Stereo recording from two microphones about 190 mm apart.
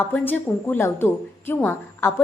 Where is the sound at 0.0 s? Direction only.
10° left (ahead or behind).